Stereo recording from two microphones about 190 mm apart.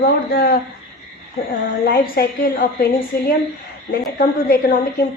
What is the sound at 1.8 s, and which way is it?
A woman's voice, 50° left (ahead or behind).